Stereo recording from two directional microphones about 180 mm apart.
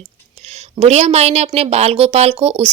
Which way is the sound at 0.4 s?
35° right (ahead or behind).